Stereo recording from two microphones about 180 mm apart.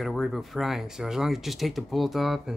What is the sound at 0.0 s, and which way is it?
Speech, centre (ahead or behind).